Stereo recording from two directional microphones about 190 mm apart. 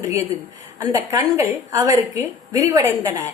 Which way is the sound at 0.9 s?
15° right (ahead or behind).